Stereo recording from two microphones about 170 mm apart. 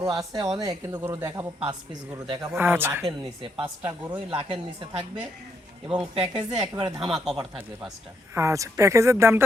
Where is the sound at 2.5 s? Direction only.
10° right (ahead or behind).